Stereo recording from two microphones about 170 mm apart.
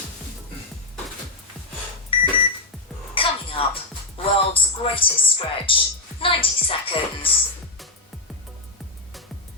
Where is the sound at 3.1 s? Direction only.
30° left (ahead or behind).